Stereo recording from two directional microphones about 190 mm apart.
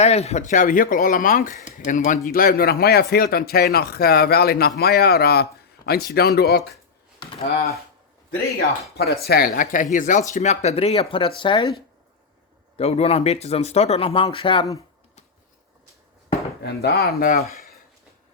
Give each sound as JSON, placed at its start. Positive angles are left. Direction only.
{"t": 0.0, "sound": "speech", "side_deg": 35}
{"t": 7.2, "sound": "speech", "side_deg": 35}
{"t": 9.0, "sound": "speech", "side_deg": 55}
{"t": 12.7, "sound": "speech", "side_deg": 30}
{"t": 16.6, "sound": "speech", "side_deg": 55}